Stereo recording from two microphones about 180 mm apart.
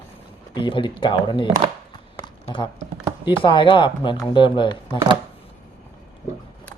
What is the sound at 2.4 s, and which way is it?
Speech, 25° left (ahead or behind).